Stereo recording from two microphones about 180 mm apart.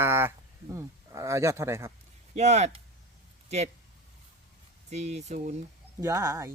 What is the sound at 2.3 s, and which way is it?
Speech, 40° right (ahead or behind).